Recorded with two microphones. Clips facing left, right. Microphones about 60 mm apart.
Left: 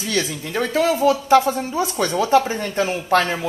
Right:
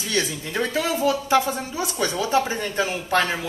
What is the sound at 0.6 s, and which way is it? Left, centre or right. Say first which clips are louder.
Speech: left 5 dB; left.